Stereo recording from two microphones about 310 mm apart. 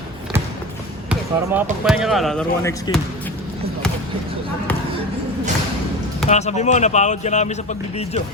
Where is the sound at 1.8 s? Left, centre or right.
Centre.